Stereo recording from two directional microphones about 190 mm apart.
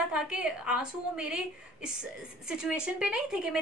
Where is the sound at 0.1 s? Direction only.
5° right (ahead or behind).